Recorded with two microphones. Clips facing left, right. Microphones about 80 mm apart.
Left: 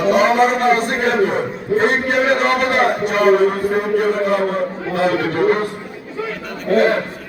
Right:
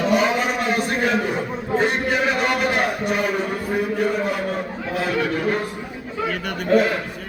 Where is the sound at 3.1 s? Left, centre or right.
Left.